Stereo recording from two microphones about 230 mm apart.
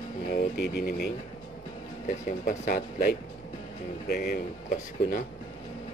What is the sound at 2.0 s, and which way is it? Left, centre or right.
Speech, left.